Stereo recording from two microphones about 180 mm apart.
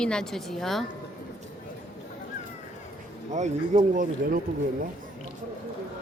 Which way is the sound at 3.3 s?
40° right (ahead or behind).